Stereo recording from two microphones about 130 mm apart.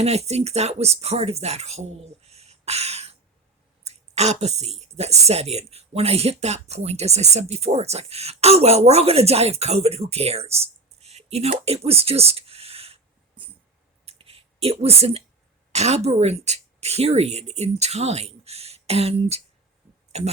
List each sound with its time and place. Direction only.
0.0 s speech: 55° right (ahead or behind)
14.0 s a sound: 50° right (ahead or behind)
15.7 s a woman's voice: 55° right (ahead or behind)